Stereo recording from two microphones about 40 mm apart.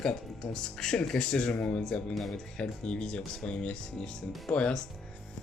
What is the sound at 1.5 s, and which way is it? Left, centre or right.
Speech, left.